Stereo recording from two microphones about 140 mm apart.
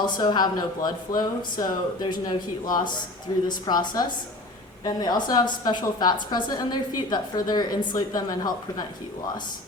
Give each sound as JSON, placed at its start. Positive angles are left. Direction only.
{"t": 0.0, "sound": "a woman's voice", "side_deg": 30}